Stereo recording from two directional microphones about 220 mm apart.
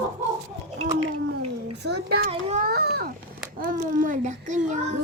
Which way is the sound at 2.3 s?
30° right (ahead or behind).